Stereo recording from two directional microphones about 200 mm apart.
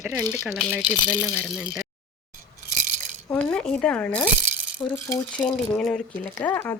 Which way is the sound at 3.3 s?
5° left (ahead or behind).